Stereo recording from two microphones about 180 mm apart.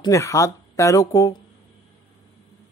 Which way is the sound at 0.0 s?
15° left (ahead or behind).